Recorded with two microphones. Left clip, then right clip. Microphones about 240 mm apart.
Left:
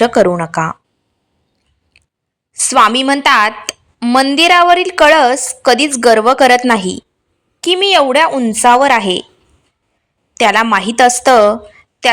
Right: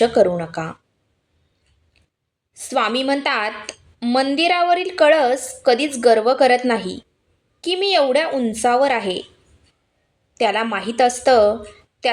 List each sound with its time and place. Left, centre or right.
0.0 s a woman's voice: left
2.5 s a woman's voice: left
10.3 s a woman's voice: left